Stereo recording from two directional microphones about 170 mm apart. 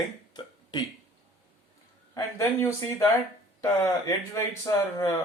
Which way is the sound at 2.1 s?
15° left (ahead or behind).